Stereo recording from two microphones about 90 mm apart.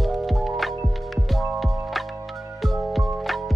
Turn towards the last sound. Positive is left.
turn(degrees=0)  # may be behind; listen again after turning